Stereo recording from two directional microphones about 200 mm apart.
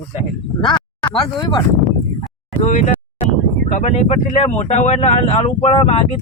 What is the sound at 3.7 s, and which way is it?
Speech, 35° left (ahead or behind).